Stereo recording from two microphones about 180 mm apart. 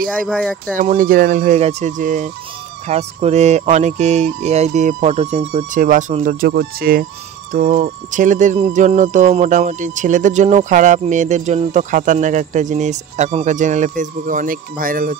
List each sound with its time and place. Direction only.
0.3 s speech: 5° left (ahead or behind)
0.7 s speech: 50° right (ahead or behind)